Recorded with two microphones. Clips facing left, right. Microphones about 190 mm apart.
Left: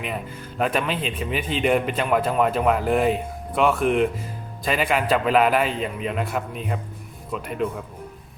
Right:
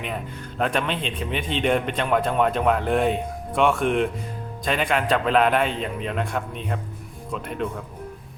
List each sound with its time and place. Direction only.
0.6 s a man's voice: 5° left (ahead or behind)